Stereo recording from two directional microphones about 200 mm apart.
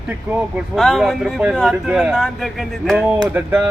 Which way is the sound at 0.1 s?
5° right (ahead or behind).